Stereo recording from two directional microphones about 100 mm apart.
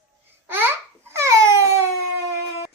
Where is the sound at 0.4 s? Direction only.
20° right (ahead or behind).